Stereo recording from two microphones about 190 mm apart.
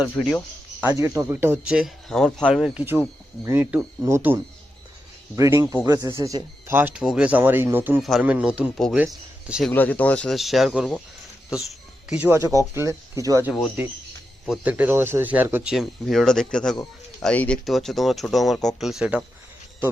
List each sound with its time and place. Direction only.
0.2 s speech: centre (ahead or behind)
0.8 s speech: 10° right (ahead or behind)
5.4 s speech: 15° right (ahead or behind)
9.7 s speech: 10° left (ahead or behind); by 13.5 s 15° right (ahead or behind)
13.5 s speech: 5° right (ahead or behind)